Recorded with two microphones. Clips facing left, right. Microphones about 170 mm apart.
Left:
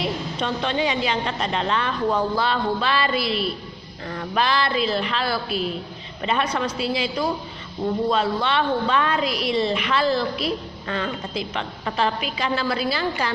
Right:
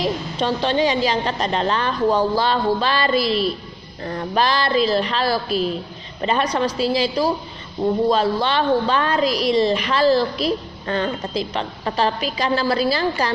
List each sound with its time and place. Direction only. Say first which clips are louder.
0.0 s a woman's voice: right 4 dB; 35° right (ahead or behind)